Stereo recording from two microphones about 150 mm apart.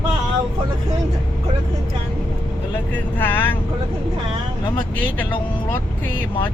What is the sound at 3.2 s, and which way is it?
Speech, 15° left (ahead or behind).